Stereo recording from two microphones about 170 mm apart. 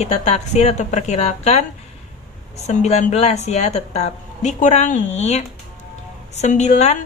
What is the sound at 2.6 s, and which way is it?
A woman's voice, 40° left (ahead or behind).